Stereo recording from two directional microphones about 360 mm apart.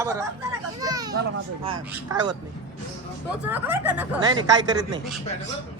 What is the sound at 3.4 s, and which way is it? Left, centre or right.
A woman's voice, centre.